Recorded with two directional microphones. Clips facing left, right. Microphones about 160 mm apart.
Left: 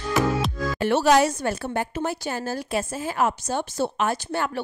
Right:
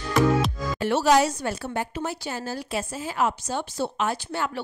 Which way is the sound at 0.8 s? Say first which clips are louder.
Left 1 dB; 60° left (ahead or behind).